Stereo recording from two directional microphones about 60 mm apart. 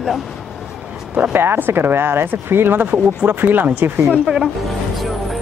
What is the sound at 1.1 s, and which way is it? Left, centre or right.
Speech, right.